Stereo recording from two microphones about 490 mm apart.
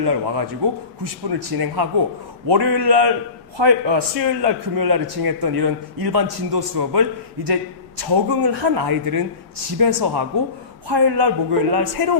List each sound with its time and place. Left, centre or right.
0.0 s a man's voice: right
8.0 s a man's voice: right